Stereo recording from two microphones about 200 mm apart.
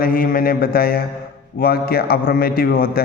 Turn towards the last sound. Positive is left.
turn(degrees=45)  # may be behind; listen again after turning